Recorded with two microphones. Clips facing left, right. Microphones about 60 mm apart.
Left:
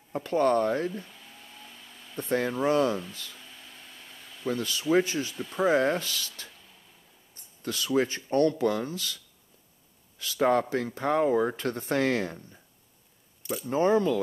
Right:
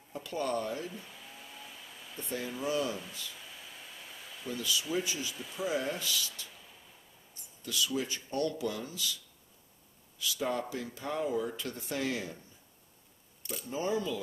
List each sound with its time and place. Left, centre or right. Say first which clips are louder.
0.1 s a man's voice: left 10 dB; left
0.9 s hair dryer: left 5 dB; centre
2.1 s a man's voice: left 10 dB; left
3.3 s a sound: even; centre
4.5 s a man's voice: left 8 dB; left
5.3 s speech: left 7 dB; centre
5.7 s a man's voice: left 9 dB; left
6.5 s a sound: even; centre
7.6 s a man's voice: left 7 dB; left
13.4 s camera: left 9 dB; centre
13.7 s a man's voice: left 9 dB; left